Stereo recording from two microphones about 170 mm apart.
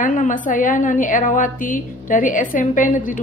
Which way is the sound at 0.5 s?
50° left (ahead or behind).